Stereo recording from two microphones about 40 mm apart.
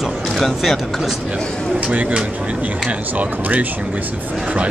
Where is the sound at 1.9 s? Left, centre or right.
Right.